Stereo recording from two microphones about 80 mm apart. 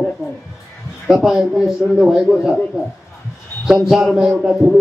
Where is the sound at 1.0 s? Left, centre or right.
Centre.